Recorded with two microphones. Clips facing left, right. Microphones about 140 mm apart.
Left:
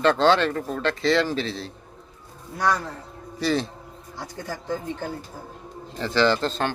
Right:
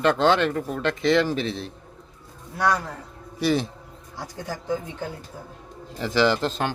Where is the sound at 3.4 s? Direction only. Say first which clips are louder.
Right 1 dB; 15° right (ahead or behind).